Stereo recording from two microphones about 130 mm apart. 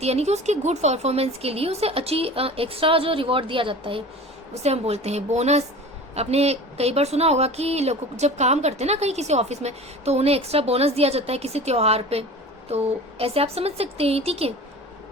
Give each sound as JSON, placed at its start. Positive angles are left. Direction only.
{"t": 0.0, "sound": "a woman's voice", "side_deg": -55}
{"t": 4.5, "sound": "a woman's voice", "side_deg": -55}